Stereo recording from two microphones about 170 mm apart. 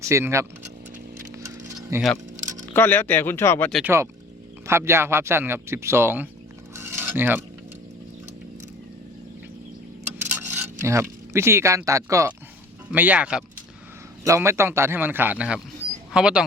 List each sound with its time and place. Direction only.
0.0 s speech: 15° right (ahead or behind)
1.9 s speech: 20° right (ahead or behind)
2.7 s speech: 10° left (ahead or behind)
3.8 s speech: 15° right (ahead or behind)
6.7 s cutlery: 15° right (ahead or behind)
10.2 s a sound: 10° right (ahead or behind)
12.9 s speech: 10° right (ahead or behind)